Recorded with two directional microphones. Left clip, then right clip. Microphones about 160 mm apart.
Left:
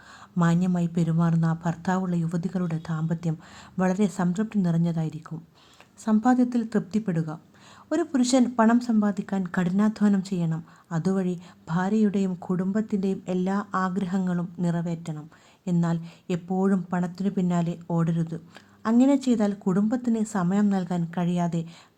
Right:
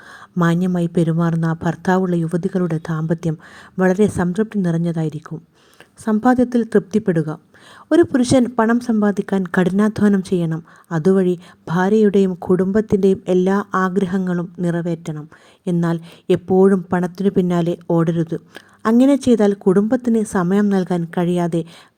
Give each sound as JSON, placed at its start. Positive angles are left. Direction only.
{"t": 0.3, "sound": "a woman's voice", "side_deg": -35}